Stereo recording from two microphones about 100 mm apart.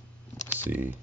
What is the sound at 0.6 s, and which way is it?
Speech, 20° right (ahead or behind).